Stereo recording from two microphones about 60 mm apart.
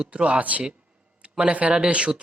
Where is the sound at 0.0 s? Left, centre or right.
Centre.